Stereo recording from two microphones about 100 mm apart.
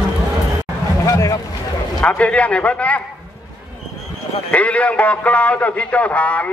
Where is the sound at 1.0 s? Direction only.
35° left (ahead or behind).